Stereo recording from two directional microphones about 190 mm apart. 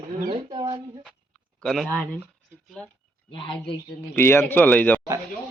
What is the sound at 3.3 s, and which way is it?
Speech, 25° left (ahead or behind).